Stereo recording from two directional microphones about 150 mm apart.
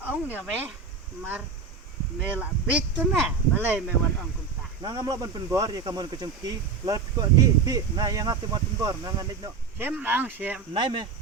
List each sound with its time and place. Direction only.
0.0 s speech: 10° right (ahead or behind)
2.4 s speech: 10° right (ahead or behind)
4.8 s speech: 25° right (ahead or behind)
9.7 s speech: 10° right (ahead or behind)
10.8 s speech: 30° right (ahead or behind)